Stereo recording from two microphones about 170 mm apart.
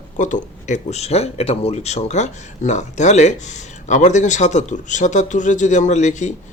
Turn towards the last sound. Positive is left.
turn(degrees=45)  # may be behind; listen again after turning